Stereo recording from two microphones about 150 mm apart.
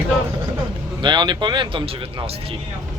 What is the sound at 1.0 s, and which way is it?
Speech, 30° right (ahead or behind).